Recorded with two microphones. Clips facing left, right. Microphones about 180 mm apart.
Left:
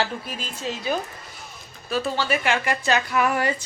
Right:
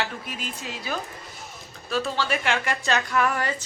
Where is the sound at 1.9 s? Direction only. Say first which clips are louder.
Left 2 dB; 5° left (ahead or behind).